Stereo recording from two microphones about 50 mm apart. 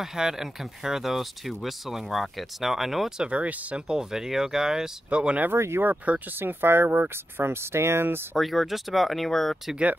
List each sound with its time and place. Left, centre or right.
0.0 s speech: centre
3.2 s speech: right
5.1 s speech: right
5.6 s speech: right
5.9 s speech: right
6.4 s speech: right
8.4 s speech: centre